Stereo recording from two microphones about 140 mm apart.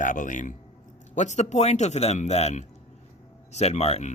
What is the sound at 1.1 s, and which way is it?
Speech, 55° left (ahead or behind).